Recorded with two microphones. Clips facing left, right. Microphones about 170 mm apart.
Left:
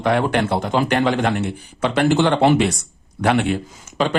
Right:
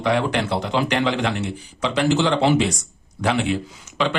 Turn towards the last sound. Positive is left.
turn(degrees=45)  # may be behind; listen again after turning